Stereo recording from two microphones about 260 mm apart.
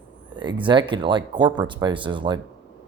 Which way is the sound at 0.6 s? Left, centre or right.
Centre.